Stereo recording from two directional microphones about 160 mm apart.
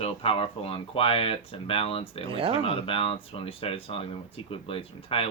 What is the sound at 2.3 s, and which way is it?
Speech, 35° right (ahead or behind).